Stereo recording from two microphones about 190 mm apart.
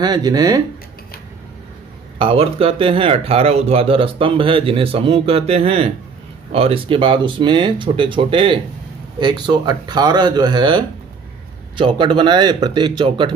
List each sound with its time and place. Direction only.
0.0 s speech: 20° right (ahead or behind)
2.1 s speech: 30° right (ahead or behind)